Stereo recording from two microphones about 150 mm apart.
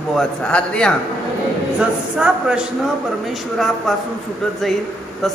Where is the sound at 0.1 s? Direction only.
5° left (ahead or behind).